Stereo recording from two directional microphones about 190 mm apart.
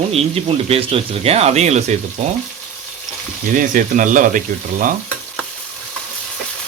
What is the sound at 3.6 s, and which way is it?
Speech, 45° right (ahead or behind).